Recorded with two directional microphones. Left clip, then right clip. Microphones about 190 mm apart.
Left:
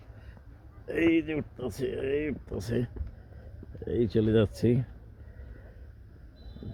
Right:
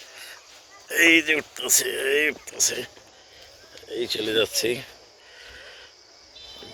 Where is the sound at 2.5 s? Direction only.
20° left (ahead or behind).